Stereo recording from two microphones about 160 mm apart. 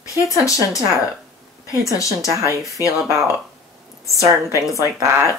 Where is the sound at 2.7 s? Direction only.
20° left (ahead or behind).